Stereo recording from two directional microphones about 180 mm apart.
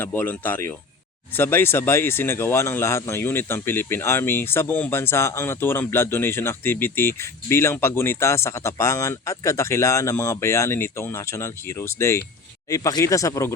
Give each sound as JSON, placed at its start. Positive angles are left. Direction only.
{"t": 0.0, "sound": "speech", "side_deg": 10}